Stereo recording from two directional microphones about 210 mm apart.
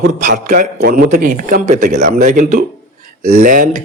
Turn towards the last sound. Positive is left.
turn(degrees=-40)  # may be behind; listen again after turning